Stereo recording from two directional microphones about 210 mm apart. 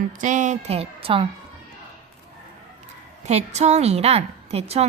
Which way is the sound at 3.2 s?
30° right (ahead or behind).